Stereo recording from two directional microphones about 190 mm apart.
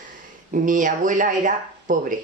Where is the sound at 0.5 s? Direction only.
45° right (ahead or behind).